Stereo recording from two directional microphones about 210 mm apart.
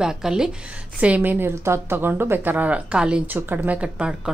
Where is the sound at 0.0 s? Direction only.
5° right (ahead or behind).